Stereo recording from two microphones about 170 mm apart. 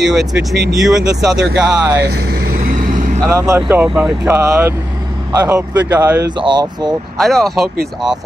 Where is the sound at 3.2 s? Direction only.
15° right (ahead or behind).